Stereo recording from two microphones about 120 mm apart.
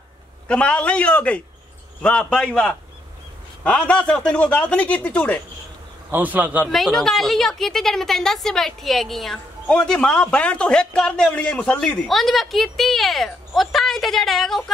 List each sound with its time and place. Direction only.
0.5 s speech: 10° left (ahead or behind)
6.1 s a man's voice: 15° right (ahead or behind)
6.7 s a woman's voice: centre (ahead or behind)